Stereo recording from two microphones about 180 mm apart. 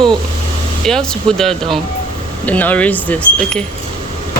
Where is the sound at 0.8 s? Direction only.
5° left (ahead or behind).